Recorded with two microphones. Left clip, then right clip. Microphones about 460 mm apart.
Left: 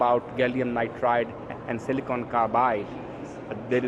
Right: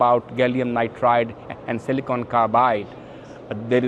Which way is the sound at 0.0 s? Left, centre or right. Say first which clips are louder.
Right 5 dB; right.